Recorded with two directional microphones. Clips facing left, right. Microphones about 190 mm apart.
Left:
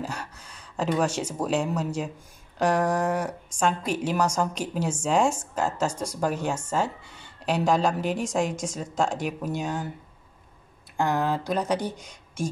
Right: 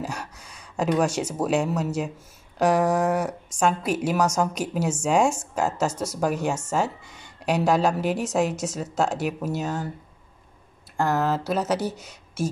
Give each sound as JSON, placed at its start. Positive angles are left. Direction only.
{"t": 0.0, "sound": "speech", "side_deg": -10}
{"t": 11.0, "sound": "speech", "side_deg": -5}